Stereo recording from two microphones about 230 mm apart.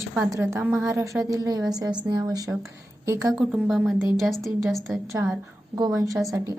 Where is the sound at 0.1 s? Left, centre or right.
Centre.